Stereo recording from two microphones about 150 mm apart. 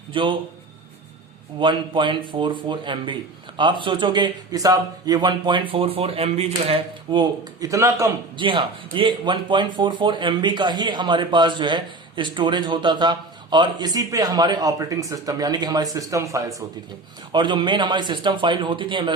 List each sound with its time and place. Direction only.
0.1 s a man's voice: 35° right (ahead or behind)
1.5 s speech: 30° right (ahead or behind)
8.4 s speech: 35° right (ahead or behind)